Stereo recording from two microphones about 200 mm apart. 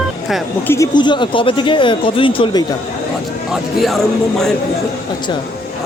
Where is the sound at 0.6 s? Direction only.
10° left (ahead or behind).